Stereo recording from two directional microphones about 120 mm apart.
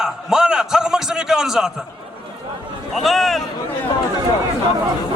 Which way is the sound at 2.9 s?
Centre (ahead or behind).